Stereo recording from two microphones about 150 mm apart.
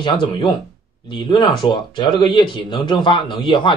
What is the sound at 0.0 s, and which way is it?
Speech, 35° left (ahead or behind).